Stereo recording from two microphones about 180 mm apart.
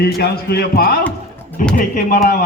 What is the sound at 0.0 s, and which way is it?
Speech, 60° left (ahead or behind).